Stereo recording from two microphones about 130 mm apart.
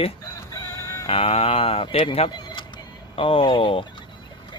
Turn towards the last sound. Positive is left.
turn(degrees=40)  # may be behind; listen again after turning